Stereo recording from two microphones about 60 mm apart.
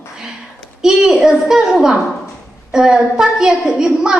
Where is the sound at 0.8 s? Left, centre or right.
Centre.